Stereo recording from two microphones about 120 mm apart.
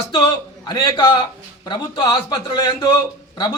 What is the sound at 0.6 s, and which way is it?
Speech, 35° left (ahead or behind).